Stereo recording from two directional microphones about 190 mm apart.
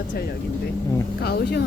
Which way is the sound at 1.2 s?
55° left (ahead or behind).